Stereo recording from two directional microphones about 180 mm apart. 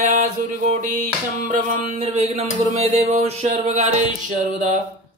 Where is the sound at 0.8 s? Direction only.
45° right (ahead or behind).